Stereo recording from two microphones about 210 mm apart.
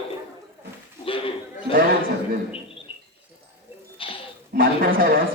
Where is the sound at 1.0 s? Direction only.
25° left (ahead or behind).